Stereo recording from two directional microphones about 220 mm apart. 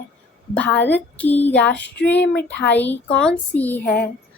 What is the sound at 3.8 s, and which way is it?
Speech, 40° left (ahead or behind).